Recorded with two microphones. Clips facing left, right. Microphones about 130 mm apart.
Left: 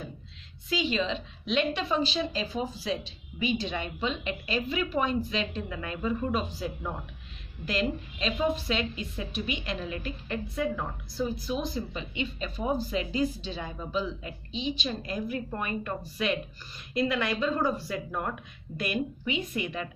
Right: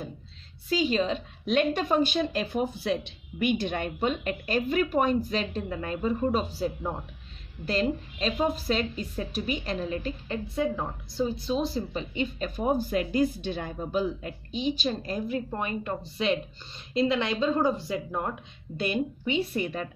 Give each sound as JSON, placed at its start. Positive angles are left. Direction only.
{"t": 0.7, "sound": "a woman's voice", "side_deg": -40}